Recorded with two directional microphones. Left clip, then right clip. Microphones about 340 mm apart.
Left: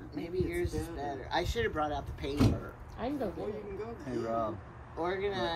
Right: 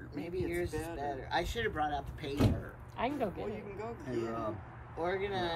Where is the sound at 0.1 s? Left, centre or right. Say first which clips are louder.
Left 2 dB; centre.